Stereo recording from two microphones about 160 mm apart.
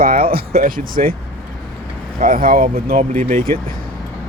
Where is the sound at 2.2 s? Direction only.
60° right (ahead or behind).